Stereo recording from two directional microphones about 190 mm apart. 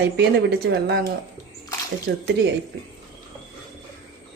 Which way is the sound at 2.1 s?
60° right (ahead or behind).